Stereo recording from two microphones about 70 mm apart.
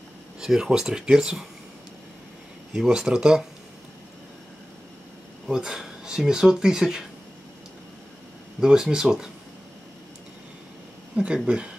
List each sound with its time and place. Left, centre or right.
0.4 s speech: centre
2.7 s speech: centre
5.5 s speech: centre
8.5 s speech: centre
11.1 s speech: centre